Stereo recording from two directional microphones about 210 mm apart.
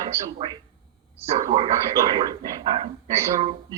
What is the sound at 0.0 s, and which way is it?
Speech, 20° right (ahead or behind).